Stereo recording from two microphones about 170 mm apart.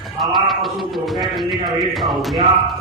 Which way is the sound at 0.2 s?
Centre (ahead or behind).